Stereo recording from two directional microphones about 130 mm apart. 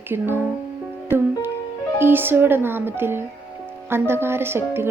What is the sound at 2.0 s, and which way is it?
Speech, 15° right (ahead or behind).